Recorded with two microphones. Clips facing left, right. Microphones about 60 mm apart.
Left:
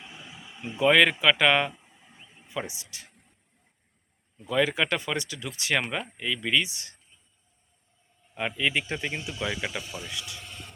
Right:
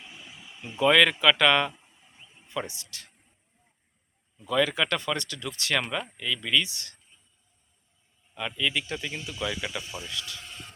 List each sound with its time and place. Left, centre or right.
0.6 s speech: centre
4.4 s speech: centre
8.4 s speech: left